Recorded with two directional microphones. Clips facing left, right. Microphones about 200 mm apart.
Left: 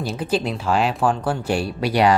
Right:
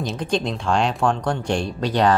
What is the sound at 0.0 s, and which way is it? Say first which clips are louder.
Speech: left 1 dB; 5° left (ahead or behind).